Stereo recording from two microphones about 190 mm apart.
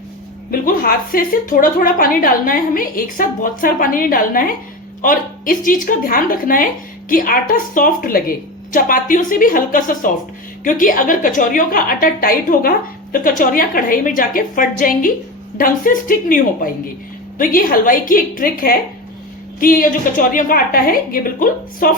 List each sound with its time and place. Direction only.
0.6 s a woman's voice: 50° left (ahead or behind)